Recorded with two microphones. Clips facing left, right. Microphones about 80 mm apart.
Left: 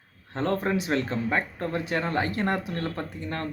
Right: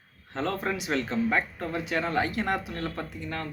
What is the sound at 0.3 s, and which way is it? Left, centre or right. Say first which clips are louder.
Speech: left 4 dB; left.